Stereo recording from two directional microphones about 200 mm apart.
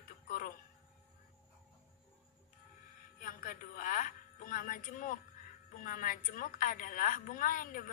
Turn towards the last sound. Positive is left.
turn(degrees=40)  # may be behind; listen again after turning